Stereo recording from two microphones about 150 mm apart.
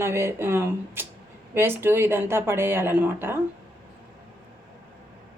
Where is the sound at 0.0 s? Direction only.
15° right (ahead or behind).